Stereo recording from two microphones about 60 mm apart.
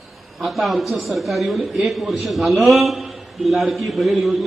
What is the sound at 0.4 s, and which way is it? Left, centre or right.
A man's voice, centre.